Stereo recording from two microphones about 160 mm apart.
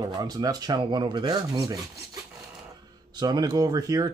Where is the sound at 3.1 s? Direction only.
25° right (ahead or behind).